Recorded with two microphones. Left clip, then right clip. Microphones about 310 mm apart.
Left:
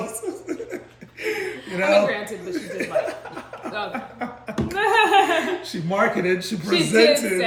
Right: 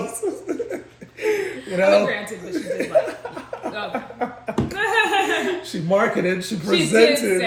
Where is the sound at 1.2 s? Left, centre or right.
Centre.